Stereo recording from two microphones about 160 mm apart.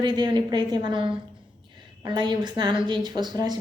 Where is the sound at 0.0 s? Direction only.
30° right (ahead or behind).